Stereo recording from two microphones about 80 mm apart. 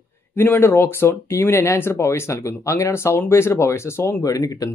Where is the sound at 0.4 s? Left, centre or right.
Left.